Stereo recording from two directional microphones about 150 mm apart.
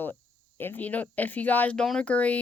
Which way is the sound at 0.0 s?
15° left (ahead or behind).